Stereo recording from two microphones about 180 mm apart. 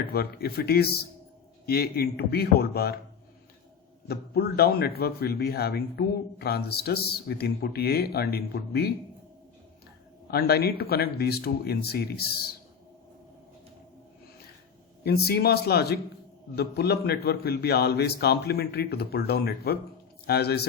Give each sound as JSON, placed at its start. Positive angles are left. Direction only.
{"t": 0.1, "sound": "speech", "side_deg": 60}
{"t": 4.1, "sound": "speech", "side_deg": 60}
{"t": 10.3, "sound": "speech", "side_deg": 60}
{"t": 15.0, "sound": "speech", "side_deg": 60}